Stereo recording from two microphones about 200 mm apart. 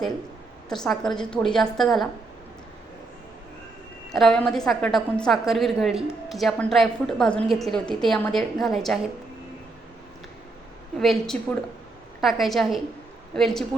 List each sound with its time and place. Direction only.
0.7 s a woman's voice: centre (ahead or behind)
4.1 s a woman's voice: centre (ahead or behind)
10.9 s a woman's voice: centre (ahead or behind)